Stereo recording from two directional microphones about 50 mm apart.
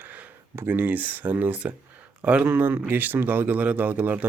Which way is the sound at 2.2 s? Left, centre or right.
Right.